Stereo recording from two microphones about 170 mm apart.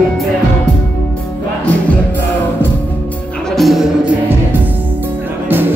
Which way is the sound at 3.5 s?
Centre (ahead or behind).